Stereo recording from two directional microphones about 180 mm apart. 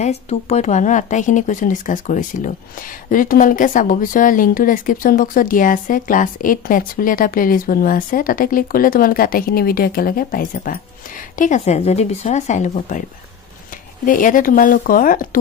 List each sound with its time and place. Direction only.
0.0 s a woman's voice: 35° left (ahead or behind)
14.0 s a woman's voice: 50° left (ahead or behind)